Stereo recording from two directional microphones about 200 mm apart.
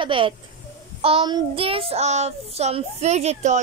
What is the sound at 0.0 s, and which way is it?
Speech, 25° right (ahead or behind).